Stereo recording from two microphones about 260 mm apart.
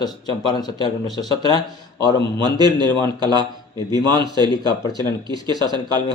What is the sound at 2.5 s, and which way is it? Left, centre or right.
Speech, centre.